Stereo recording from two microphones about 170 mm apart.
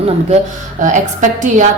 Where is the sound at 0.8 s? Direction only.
45° right (ahead or behind).